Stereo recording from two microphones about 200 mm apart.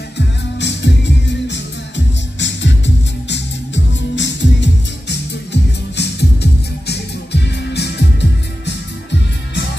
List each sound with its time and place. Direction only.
0.6 s music: 60° left (ahead or behind)